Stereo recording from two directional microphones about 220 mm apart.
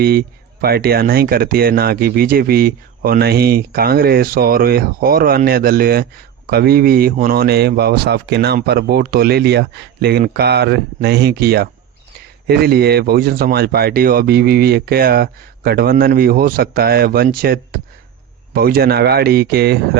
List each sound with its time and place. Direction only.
0.0 s speech: 45° right (ahead or behind)